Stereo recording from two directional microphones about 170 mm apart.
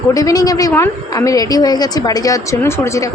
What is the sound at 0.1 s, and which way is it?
A woman's voice, 20° left (ahead or behind).